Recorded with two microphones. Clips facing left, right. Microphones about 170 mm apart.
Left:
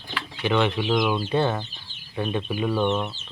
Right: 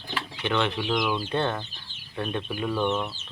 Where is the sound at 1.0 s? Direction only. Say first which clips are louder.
Left 3 dB; 25° left (ahead or behind).